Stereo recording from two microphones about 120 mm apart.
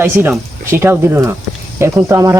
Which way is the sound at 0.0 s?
20° right (ahead or behind).